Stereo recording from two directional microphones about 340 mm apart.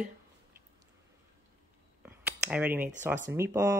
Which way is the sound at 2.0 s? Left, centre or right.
Centre.